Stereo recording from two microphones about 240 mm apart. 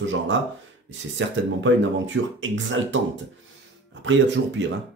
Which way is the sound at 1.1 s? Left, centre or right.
Right.